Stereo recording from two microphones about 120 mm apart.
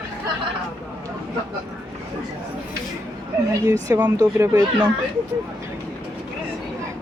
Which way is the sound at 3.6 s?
20° right (ahead or behind).